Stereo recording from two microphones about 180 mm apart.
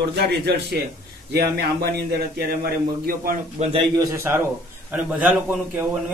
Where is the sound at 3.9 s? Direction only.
15° right (ahead or behind).